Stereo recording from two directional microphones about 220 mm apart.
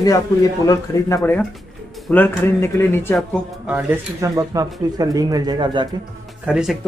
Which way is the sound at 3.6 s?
10° right (ahead or behind).